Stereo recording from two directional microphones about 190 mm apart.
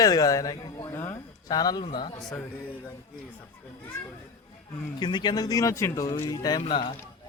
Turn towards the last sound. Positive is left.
turn(degrees=25)  # may be behind; listen again after turning